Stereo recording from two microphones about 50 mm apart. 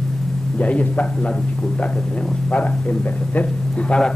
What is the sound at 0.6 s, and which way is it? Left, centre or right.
Speech, left.